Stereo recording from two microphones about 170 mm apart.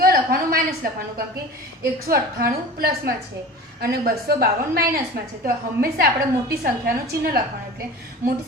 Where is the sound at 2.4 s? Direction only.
60° right (ahead or behind).